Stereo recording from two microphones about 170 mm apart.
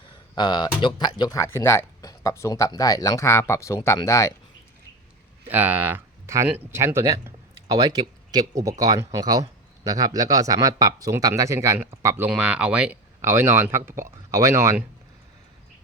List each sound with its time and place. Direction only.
0.0 s speech: 25° left (ahead or behind)
5.5 s speech: 10° right (ahead or behind)